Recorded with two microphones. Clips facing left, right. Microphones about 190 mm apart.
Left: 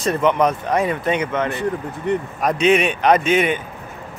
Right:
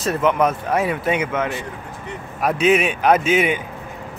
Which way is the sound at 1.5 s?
60° left (ahead or behind).